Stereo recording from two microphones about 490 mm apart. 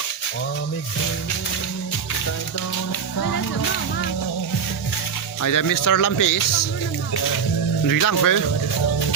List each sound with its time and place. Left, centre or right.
5.4 s speech: left
7.9 s speech: left